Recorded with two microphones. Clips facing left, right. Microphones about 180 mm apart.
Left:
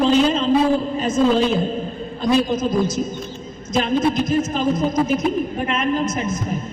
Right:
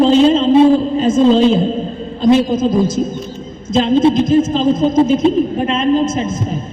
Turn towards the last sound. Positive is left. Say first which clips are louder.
# right 4 dB
turn(degrees=-25)  # may be behind; listen again after turning